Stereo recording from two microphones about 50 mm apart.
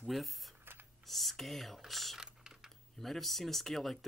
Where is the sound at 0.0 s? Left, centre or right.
Centre.